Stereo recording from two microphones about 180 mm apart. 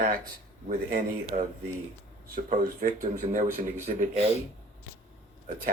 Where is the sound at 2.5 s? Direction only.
50° right (ahead or behind).